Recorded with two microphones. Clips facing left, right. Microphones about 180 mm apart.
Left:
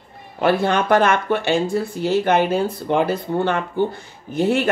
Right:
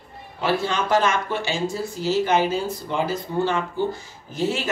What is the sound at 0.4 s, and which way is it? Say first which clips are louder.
Speech: left 5 dB; 55° left (ahead or behind).